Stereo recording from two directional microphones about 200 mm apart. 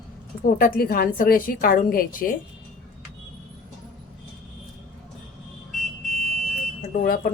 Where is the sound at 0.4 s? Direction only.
45° left (ahead or behind).